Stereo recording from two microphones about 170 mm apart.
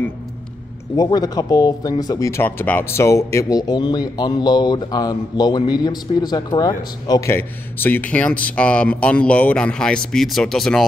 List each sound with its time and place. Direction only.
0.9 s speech: 25° left (ahead or behind); by 10.9 s centre (ahead or behind)